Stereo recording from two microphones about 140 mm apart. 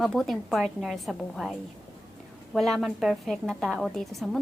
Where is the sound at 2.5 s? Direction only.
Centre (ahead or behind).